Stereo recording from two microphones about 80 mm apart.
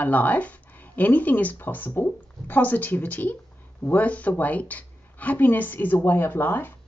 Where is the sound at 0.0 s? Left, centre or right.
Centre.